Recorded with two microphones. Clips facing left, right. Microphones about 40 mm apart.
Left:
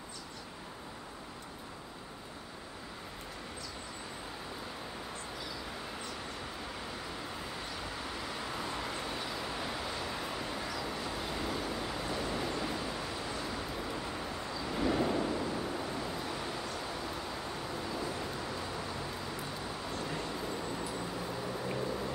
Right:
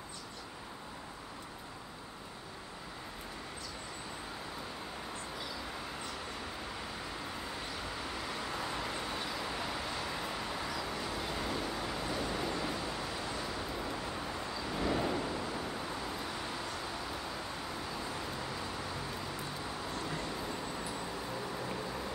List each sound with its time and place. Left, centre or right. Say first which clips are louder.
7.7 s vehicle: even; centre
17.9 s vehicle: left 2 dB; centre